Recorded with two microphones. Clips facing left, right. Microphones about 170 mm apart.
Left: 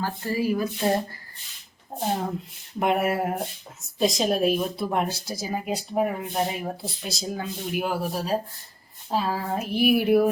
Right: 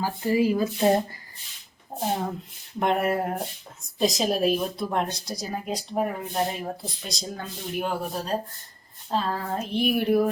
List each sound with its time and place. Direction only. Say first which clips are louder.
0.0 s speech: right 3 dB; 15° right (ahead or behind)
2.7 s speech: left 1 dB; 5° left (ahead or behind)